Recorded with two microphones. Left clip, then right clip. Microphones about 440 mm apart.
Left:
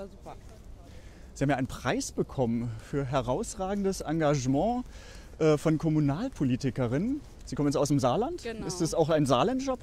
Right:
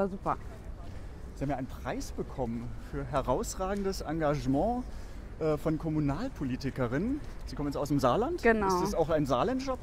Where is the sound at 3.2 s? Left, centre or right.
Left.